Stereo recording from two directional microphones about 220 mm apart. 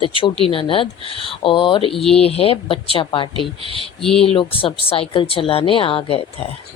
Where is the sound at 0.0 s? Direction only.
25° left (ahead or behind).